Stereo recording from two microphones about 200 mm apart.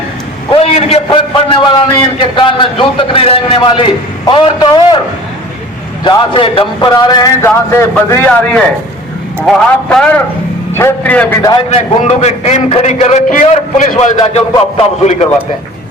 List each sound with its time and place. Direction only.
0.5 s a man's voice: 30° left (ahead or behind)
6.1 s a man's voice: 25° left (ahead or behind); by 11.3 s 5° left (ahead or behind)
11.4 s a man's voice: 25° left (ahead or behind)